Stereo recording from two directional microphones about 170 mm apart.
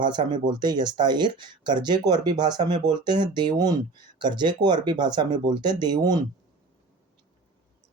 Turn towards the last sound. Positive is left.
turn(degrees=-25)  # may be behind; listen again after turning